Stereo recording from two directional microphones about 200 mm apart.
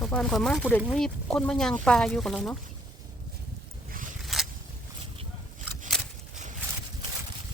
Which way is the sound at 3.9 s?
40° right (ahead or behind).